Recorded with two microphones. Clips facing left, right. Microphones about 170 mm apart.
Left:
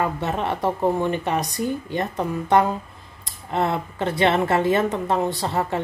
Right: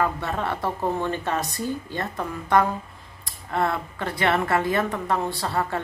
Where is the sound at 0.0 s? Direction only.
20° left (ahead or behind).